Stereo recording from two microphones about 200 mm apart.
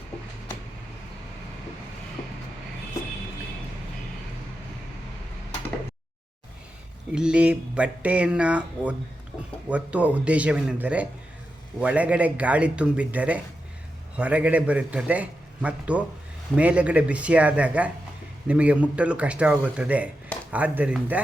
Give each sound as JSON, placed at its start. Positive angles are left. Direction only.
{"t": 7.1, "sound": "a man's voice", "side_deg": -5}